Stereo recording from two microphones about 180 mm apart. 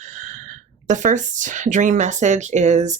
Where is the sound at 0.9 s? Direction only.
45° right (ahead or behind).